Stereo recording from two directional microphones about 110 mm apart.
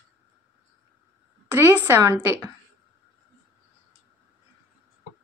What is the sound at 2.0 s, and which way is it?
Speech, 25° right (ahead or behind).